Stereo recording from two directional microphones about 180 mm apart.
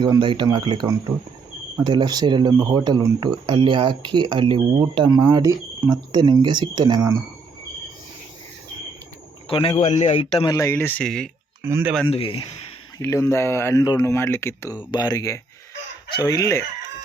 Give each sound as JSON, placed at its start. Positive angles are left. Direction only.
{"t": 0.0, "sound": "speech", "side_deg": -25}
{"t": 9.5, "sound": "a man's voice", "side_deg": 30}
{"t": 10.5, "sound": "speech", "side_deg": 15}
{"t": 11.6, "sound": "speech", "side_deg": -10}
{"t": 12.0, "sound": "chicken", "side_deg": 30}
{"t": 13.0, "sound": "speech", "side_deg": 15}
{"t": 14.8, "sound": "chicken", "side_deg": 25}